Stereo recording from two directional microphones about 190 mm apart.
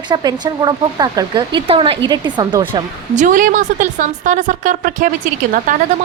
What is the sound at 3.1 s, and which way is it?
Speech, 45° right (ahead or behind).